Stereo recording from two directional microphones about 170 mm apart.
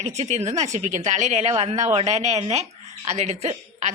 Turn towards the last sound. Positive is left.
turn(degrees=-40)  # may be behind; listen again after turning